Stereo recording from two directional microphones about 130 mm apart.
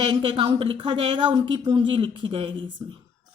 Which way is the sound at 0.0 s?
40° right (ahead or behind).